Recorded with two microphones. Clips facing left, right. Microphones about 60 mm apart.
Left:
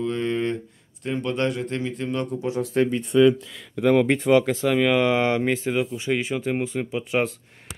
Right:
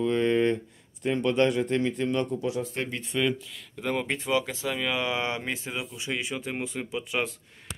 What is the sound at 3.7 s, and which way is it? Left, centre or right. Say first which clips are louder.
Speech: left 11 dB; left.